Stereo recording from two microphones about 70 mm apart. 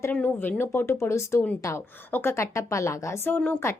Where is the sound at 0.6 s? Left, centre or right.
Left.